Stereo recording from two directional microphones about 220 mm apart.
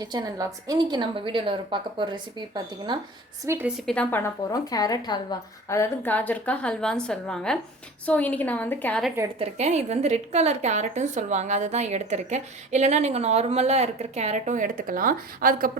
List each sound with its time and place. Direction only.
0.0 s a woman's voice: 15° right (ahead or behind)
3.4 s a woman's voice: 10° right (ahead or behind)
3.8 s a woman's voice: 5° left (ahead or behind)
9.4 s a woman's voice: 30° right (ahead or behind)